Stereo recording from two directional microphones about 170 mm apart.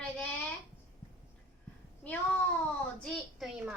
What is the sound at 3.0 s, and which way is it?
Child singing, centre (ahead or behind).